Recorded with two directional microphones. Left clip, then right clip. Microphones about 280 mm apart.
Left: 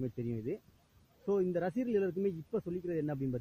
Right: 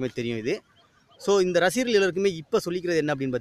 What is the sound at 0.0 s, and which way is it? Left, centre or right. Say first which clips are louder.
A man's voice: right 11 dB; centre.